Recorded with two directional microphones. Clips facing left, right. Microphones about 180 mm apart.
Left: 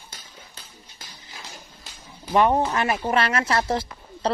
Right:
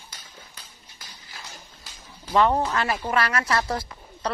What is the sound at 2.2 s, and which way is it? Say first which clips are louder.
Speech: left 1 dB; 15° left (ahead or behind).